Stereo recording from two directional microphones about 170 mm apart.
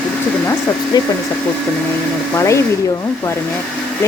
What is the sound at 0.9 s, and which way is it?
Speech, 25° left (ahead or behind).